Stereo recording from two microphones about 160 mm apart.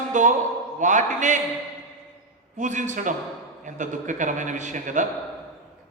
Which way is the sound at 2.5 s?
50° right (ahead or behind).